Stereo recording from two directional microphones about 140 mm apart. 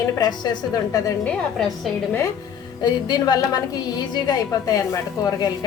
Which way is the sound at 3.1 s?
30° left (ahead or behind).